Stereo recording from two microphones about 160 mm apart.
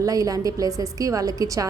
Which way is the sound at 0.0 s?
20° right (ahead or behind).